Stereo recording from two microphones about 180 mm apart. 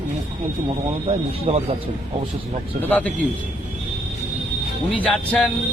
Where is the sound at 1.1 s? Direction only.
35° right (ahead or behind).